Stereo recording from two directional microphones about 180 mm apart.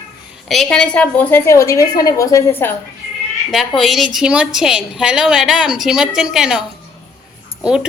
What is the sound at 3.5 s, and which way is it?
A woman's voice, centre (ahead or behind).